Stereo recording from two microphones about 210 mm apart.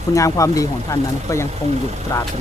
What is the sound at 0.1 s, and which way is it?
Speech, 15° left (ahead or behind).